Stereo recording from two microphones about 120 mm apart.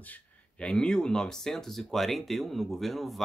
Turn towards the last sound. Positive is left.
turn(degrees=0)  # may be behind; listen again after turning